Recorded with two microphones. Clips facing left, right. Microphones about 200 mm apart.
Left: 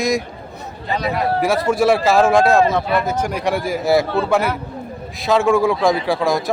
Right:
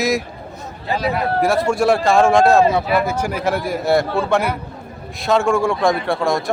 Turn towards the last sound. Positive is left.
turn(degrees=0)  # may be behind; listen again after turning